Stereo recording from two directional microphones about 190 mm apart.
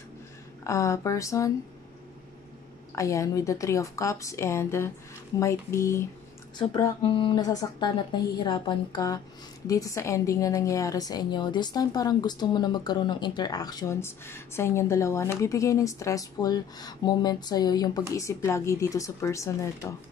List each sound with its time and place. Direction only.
0.7 s a woman's voice: 15° left (ahead or behind)
3.0 s a woman's voice: 15° left (ahead or behind)
6.7 s a woman's voice: 25° left (ahead or behind)